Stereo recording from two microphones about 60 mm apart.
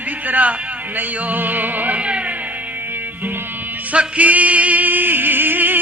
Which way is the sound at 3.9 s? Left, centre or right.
Right.